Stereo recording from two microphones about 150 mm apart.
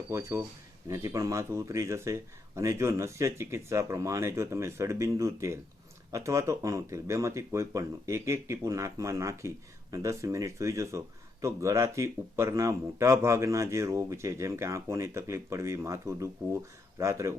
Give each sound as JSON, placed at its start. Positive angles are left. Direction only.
{"t": 0.1, "sound": "speech", "side_deg": -15}